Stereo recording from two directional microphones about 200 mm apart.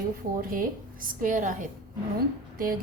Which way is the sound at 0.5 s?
45° right (ahead or behind).